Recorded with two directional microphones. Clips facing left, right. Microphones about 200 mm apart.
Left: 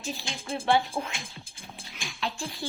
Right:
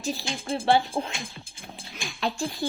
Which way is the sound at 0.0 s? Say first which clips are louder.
Right 5 dB; 35° right (ahead or behind).